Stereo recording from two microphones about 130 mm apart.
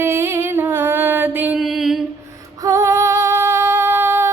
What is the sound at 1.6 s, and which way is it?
Mantra, centre (ahead or behind).